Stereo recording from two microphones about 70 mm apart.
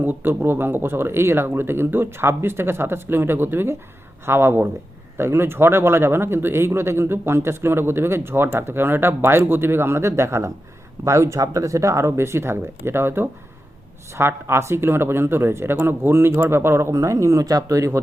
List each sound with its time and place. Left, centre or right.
0.0 s a man's voice: right
16.9 s speech: right